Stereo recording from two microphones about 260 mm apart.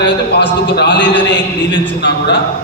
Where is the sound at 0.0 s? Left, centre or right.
Left.